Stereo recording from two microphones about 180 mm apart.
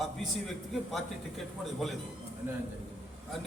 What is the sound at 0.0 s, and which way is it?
A man's voice, centre (ahead or behind).